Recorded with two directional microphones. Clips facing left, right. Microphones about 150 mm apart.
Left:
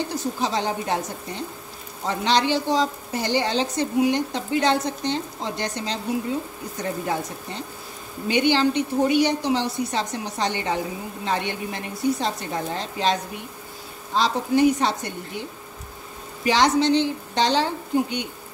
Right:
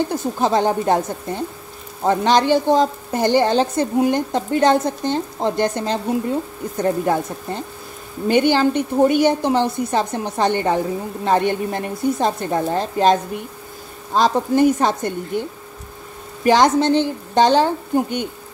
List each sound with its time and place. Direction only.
0.1 s a woman's voice: 50° right (ahead or behind)
16.4 s a woman's voice: 50° right (ahead or behind)